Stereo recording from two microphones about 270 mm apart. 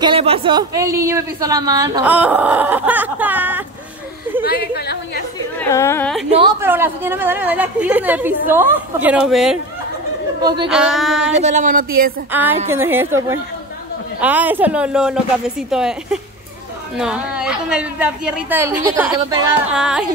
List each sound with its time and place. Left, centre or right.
0.0 s speech: centre
4.5 s a sound: left
5.6 s a woman's voice: centre
6.3 s speech: centre
10.4 s speech: centre
10.7 s a woman's voice: centre
11.3 s speech: right
12.3 s a woman's voice: centre